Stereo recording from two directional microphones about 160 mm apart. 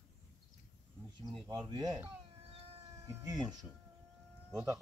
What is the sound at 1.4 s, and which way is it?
Speech, 25° right (ahead or behind).